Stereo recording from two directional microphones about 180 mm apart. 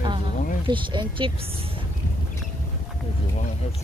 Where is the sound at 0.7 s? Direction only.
25° right (ahead or behind).